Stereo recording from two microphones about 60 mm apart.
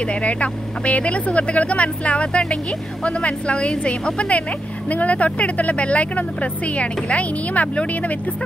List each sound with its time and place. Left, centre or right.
0.0 s speech: left